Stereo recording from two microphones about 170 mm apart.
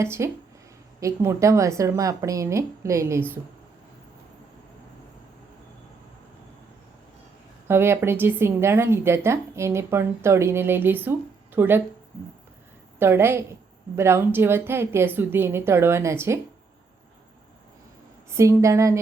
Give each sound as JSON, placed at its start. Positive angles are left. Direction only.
{"t": 0.0, "sound": "a woman's voice", "side_deg": -15}
{"t": 7.7, "sound": "a woman's voice", "side_deg": -15}
{"t": 13.0, "sound": "a woman's voice", "side_deg": -15}
{"t": 18.3, "sound": "a woman's voice", "side_deg": -15}